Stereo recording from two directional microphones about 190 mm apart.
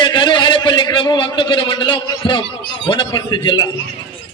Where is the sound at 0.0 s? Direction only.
25° left (ahead or behind).